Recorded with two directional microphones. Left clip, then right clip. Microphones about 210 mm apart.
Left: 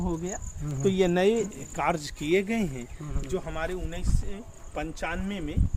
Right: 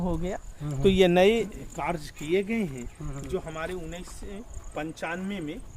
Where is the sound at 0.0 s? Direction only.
55° right (ahead or behind).